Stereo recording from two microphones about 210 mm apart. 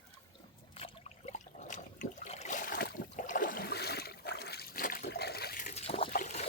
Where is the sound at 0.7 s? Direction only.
30° left (ahead or behind).